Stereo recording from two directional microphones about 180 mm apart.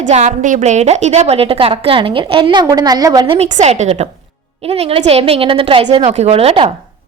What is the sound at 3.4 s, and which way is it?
A woman's voice, 40° right (ahead or behind).